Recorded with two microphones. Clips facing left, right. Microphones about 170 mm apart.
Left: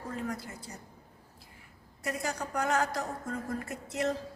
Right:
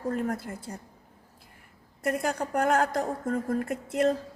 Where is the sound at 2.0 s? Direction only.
55° right (ahead or behind).